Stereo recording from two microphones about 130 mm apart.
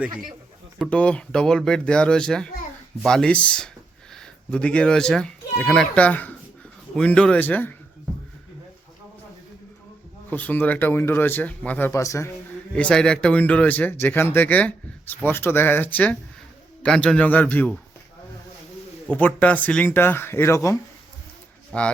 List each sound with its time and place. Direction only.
0.9 s a child's voice: 10° left (ahead or behind)
10.2 s speech: 10° left (ahead or behind)
12.7 s speech: 5° left (ahead or behind)
19.1 s speech: 10° left (ahead or behind)
21.7 s speech: 10° left (ahead or behind)